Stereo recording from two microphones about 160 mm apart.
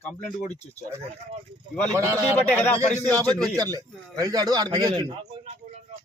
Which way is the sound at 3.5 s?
25° right (ahead or behind).